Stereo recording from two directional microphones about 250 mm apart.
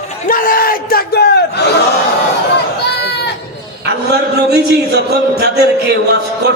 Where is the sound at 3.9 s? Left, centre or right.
Right.